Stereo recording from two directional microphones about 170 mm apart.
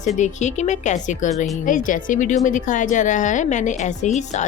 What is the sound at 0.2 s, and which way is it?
A woman's voice, 45° left (ahead or behind).